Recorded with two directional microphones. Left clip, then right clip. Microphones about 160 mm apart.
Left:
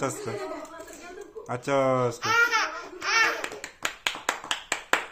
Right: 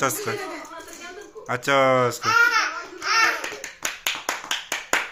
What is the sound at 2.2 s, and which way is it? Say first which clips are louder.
Speech: right 3 dB; 40° left (ahead or behind).